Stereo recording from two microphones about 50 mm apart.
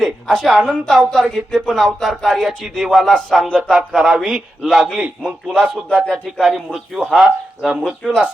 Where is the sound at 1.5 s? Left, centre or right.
Centre.